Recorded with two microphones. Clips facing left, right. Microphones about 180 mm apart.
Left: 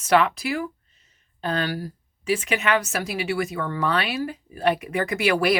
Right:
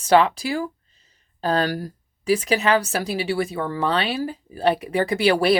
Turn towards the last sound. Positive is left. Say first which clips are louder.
# right 3 dB
turn(degrees=-30)  # may be behind; listen again after turning